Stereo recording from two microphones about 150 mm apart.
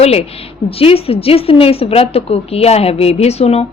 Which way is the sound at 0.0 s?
40° left (ahead or behind).